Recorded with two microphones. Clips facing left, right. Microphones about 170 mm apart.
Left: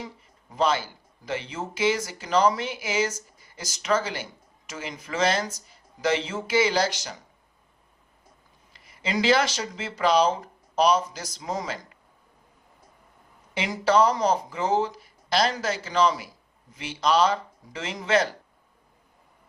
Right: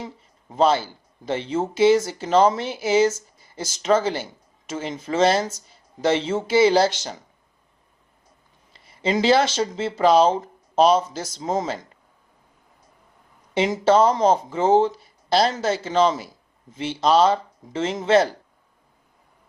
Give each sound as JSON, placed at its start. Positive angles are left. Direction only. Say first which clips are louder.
{"t": 0.5, "sound": "speech", "louder": "right 5 dB", "side_deg": -25}
{"t": 8.7, "sound": "speech", "louder": "right 6 dB", "side_deg": -30}
{"t": 13.5, "sound": "speech", "louder": "right 5 dB", "side_deg": -25}